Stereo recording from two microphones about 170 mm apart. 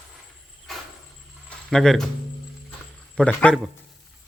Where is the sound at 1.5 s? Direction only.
5° left (ahead or behind).